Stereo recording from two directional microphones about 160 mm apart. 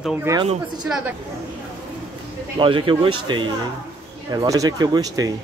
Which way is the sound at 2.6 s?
30° right (ahead or behind).